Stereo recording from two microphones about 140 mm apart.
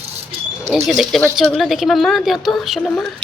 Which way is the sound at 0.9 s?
Centre (ahead or behind).